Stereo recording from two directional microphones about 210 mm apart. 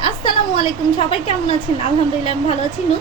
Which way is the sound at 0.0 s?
25° left (ahead or behind).